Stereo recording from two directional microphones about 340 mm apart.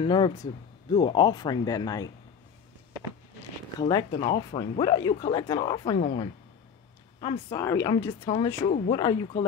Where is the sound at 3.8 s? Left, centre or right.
Centre.